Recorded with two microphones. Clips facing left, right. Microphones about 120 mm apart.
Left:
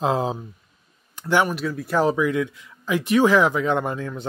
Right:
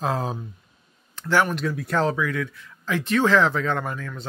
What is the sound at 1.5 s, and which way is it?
Speech, centre (ahead or behind).